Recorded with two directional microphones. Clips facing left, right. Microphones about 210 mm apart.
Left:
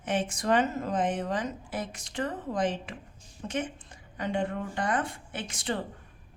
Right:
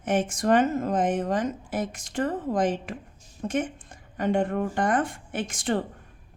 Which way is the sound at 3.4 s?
50° right (ahead or behind).